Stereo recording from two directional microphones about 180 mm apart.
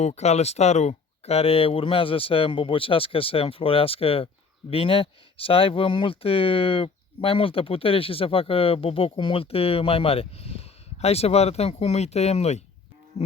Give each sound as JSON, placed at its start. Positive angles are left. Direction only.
{"t": 0.0, "sound": "speech", "side_deg": 35}